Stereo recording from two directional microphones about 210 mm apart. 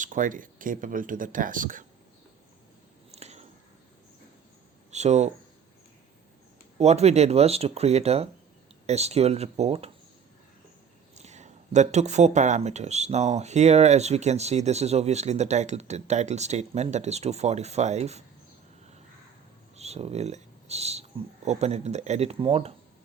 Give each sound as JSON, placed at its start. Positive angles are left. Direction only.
{"t": 0.0, "sound": "speech", "side_deg": -40}
{"t": 3.1, "sound": "a sound", "side_deg": -30}
{"t": 4.9, "sound": "speech", "side_deg": -30}
{"t": 6.7, "sound": "speech", "side_deg": -30}
{"t": 11.1, "sound": "speech", "side_deg": -35}
{"t": 19.7, "sound": "speech", "side_deg": -30}